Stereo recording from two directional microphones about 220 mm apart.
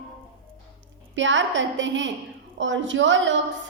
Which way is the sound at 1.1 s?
55° right (ahead or behind).